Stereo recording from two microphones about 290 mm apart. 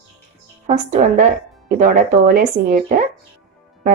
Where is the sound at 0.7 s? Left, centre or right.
Right.